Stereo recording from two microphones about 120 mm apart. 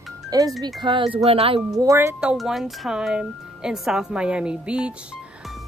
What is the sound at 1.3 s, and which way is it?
Speech, 55° right (ahead or behind).